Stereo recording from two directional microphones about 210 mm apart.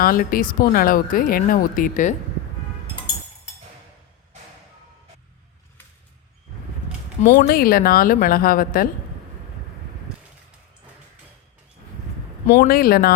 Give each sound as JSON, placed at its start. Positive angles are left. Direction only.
{"t": 0.0, "sound": "speech", "side_deg": 45}
{"t": 7.2, "sound": "a woman's voice", "side_deg": 45}
{"t": 12.5, "sound": "a woman's voice", "side_deg": 45}